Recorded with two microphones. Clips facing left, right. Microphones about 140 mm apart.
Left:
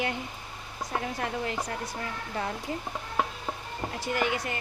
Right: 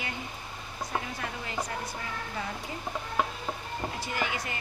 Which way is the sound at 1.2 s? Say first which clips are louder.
Left 4 dB; 60° left (ahead or behind).